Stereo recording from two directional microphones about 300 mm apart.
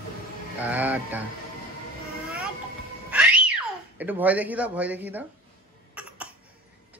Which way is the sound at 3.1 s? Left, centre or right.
Centre.